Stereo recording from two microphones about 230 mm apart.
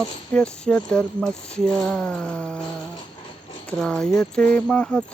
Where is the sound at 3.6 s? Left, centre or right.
Centre.